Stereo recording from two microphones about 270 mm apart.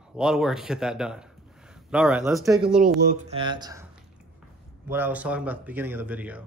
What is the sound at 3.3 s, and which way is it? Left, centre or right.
Speech, centre.